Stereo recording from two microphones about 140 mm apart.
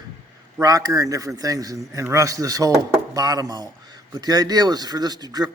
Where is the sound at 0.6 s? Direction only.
25° right (ahead or behind).